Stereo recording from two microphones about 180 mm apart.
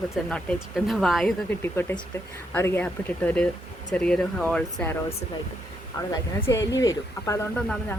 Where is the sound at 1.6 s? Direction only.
10° left (ahead or behind).